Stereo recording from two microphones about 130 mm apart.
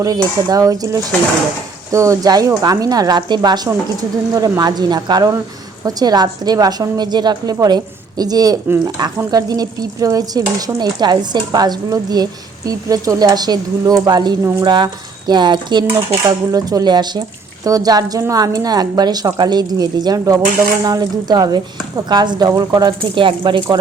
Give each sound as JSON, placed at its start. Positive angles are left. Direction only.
{"t": 0.0, "sound": "speech", "side_deg": -30}
{"t": 4.4, "sound": "stir", "side_deg": -30}
{"t": 8.2, "sound": "speech", "side_deg": -30}
{"t": 9.0, "sound": "stir", "side_deg": -35}
{"t": 16.0, "sound": "speech", "side_deg": -30}
{"t": 20.8, "sound": "stir", "side_deg": -30}